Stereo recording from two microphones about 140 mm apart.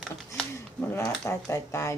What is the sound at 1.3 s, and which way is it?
Speech, 20° left (ahead or behind).